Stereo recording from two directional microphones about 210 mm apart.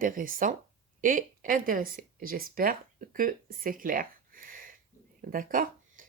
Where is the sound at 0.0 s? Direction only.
40° right (ahead or behind).